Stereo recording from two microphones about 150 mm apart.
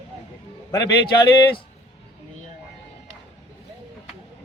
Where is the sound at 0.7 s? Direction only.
25° left (ahead or behind).